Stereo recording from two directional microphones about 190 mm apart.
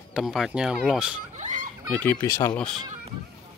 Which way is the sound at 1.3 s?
40° right (ahead or behind).